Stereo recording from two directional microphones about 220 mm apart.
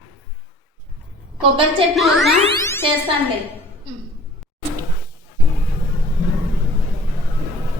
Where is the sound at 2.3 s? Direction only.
25° right (ahead or behind).